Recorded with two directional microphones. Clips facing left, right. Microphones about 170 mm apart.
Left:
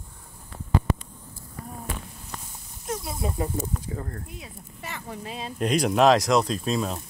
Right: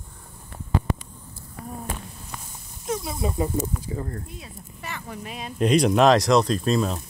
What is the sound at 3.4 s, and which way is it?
Speech, 5° right (ahead or behind).